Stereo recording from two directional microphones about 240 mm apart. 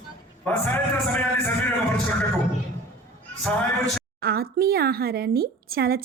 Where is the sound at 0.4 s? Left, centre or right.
Centre.